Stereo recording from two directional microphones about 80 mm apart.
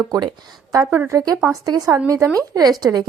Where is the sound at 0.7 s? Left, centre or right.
Right.